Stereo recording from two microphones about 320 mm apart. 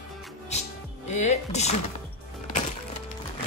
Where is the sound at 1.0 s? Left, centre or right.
Left.